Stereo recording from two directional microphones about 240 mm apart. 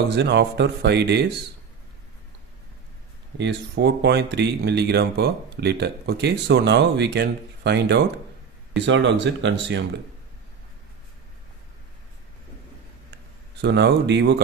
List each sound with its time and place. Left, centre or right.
0.1 s speech: right
3.3 s speech: right
13.6 s speech: right